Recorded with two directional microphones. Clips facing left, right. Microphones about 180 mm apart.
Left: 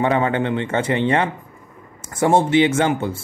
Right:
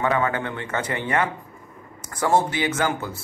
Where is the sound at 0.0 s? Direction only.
25° left (ahead or behind).